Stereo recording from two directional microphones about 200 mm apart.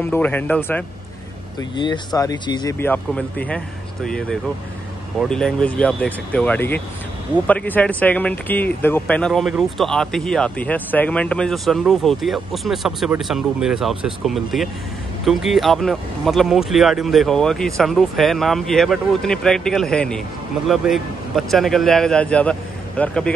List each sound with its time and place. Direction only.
0.0 s speech: 10° left (ahead or behind)
1.6 s speech: 20° left (ahead or behind)
2.8 s speech: 10° left (ahead or behind)